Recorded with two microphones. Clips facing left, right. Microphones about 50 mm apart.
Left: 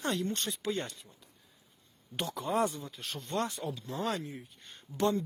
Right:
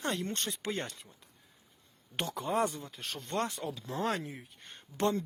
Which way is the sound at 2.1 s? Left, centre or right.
Right.